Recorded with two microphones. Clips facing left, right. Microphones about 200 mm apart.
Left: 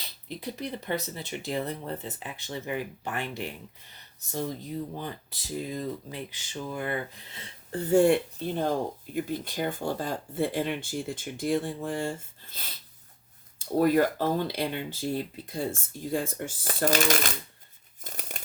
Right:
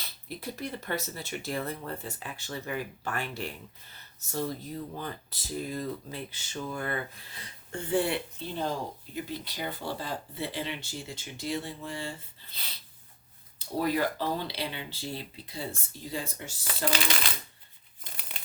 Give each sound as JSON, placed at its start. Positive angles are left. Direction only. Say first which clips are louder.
{"t": 0.3, "sound": "speech", "louder": "left 2 dB", "side_deg": 20}
{"t": 18.0, "sound": "crumpling", "louder": "left 6 dB", "side_deg": 45}